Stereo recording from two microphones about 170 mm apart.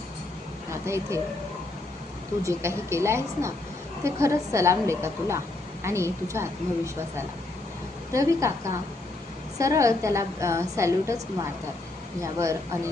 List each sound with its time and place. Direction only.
0.7 s speech: 15° right (ahead or behind)
2.4 s a woman's voice: 15° right (ahead or behind)
8.1 s a woman's voice: 15° right (ahead or behind)